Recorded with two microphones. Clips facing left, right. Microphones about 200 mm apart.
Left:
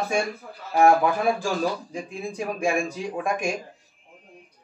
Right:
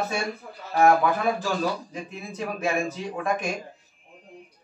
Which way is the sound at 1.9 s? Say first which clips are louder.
Left 4 dB; 10° left (ahead or behind).